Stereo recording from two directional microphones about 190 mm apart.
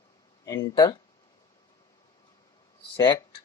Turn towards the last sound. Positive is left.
turn(degrees=25)  # may be behind; listen again after turning